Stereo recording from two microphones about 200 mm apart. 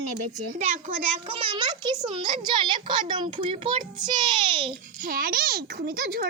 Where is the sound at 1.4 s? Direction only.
25° right (ahead or behind).